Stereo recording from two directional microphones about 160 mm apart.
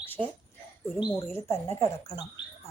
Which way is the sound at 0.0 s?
10° left (ahead or behind).